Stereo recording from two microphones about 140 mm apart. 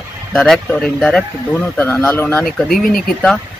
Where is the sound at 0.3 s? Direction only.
5° left (ahead or behind).